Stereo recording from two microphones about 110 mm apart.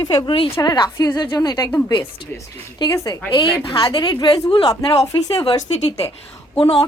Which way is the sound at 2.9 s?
30° left (ahead or behind).